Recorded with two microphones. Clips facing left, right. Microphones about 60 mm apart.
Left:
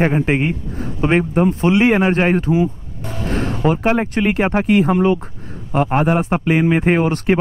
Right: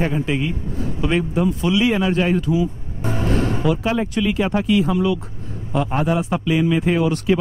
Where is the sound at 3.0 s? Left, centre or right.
Right.